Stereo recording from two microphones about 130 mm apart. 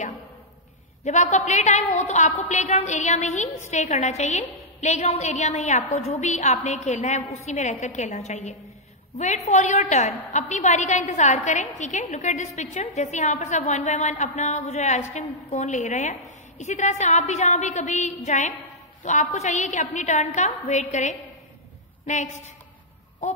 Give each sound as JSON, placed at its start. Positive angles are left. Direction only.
{"t": 1.0, "sound": "a woman's voice", "side_deg": 65}